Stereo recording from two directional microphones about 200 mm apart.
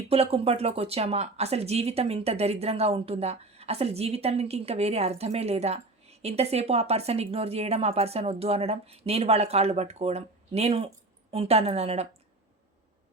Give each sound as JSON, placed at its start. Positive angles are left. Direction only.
{"t": 0.1, "sound": "speech", "side_deg": -30}